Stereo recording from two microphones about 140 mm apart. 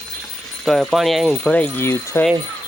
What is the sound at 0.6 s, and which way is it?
Speech, centre (ahead or behind).